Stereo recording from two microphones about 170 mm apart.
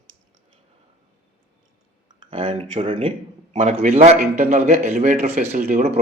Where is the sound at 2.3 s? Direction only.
35° right (ahead or behind).